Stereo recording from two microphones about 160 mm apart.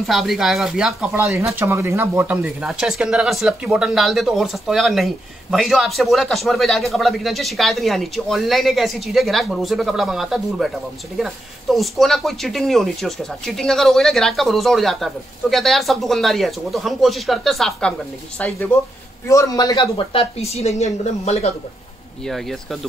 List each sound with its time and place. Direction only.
0.0 s speech: centre (ahead or behind)
1.5 s speech: 15° right (ahead or behind); by 21.5 s 45° left (ahead or behind)
22.2 s speech: centre (ahead or behind)